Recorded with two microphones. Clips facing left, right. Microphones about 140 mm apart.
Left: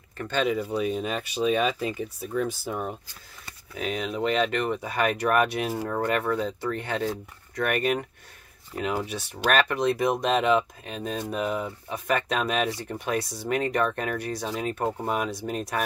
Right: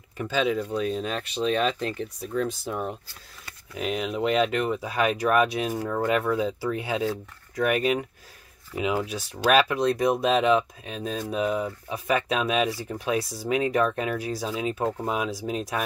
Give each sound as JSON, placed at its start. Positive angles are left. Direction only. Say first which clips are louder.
{"t": 0.2, "sound": "speech", "louder": "right 1 dB", "side_deg": 0}